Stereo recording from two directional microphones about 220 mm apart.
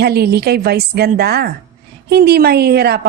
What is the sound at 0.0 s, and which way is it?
A woman's voice, 45° right (ahead or behind).